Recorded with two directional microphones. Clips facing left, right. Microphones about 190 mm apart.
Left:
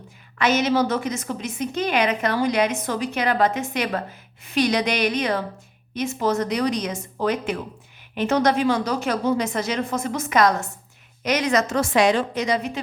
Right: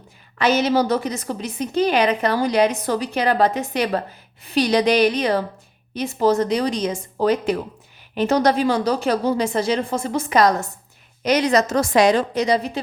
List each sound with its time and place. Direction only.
0.3 s a woman's voice: 35° right (ahead or behind)